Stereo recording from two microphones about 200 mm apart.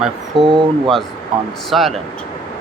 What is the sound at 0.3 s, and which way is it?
Speech, 25° right (ahead or behind).